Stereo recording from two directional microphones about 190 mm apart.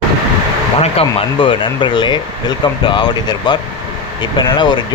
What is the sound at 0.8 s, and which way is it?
Speech, 30° left (ahead or behind).